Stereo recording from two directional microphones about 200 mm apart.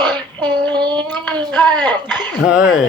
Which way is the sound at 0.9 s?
10° left (ahead or behind).